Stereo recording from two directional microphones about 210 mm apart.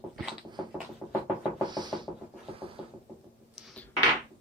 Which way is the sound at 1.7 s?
20° right (ahead or behind).